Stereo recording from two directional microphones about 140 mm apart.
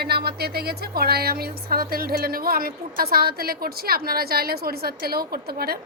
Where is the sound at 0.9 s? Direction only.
90° right.